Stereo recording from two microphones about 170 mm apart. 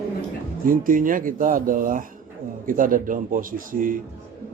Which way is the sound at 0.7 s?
55° right (ahead or behind).